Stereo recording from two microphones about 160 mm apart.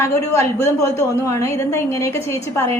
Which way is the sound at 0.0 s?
15° left (ahead or behind).